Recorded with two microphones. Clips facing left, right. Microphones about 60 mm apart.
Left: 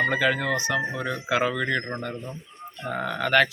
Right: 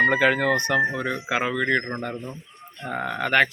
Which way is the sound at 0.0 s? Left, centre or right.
Right.